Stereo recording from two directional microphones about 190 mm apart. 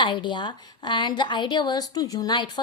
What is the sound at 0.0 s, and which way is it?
A woman's voice, 25° left (ahead or behind).